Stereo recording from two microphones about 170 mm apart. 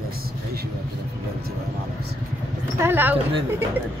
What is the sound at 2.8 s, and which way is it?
Speech, 10° right (ahead or behind).